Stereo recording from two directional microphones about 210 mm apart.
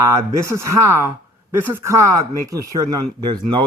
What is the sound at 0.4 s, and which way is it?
Speech, 15° right (ahead or behind).